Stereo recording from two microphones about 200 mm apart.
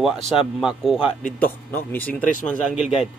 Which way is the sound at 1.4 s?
10° left (ahead or behind).